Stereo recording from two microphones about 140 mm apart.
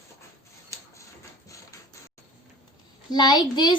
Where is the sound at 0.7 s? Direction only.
20° left (ahead or behind).